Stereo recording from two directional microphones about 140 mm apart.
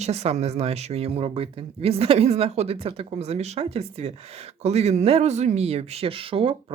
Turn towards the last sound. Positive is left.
turn(degrees=-40)  # may be behind; listen again after turning